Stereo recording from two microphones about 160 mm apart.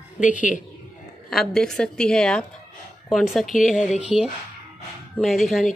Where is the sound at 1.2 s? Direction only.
Centre (ahead or behind).